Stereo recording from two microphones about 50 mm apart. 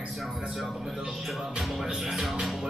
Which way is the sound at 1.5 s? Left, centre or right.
Centre.